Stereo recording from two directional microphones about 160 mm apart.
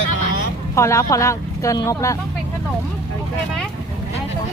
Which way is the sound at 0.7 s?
20° left (ahead or behind).